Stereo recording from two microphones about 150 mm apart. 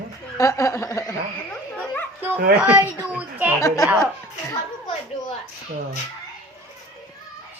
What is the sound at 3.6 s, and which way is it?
Speech, 20° left (ahead or behind).